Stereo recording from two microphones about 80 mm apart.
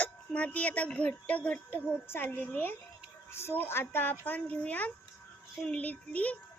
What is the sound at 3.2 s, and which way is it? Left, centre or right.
A child's voice, left.